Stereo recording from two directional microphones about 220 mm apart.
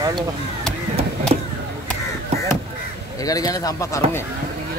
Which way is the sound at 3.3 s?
15° left (ahead or behind).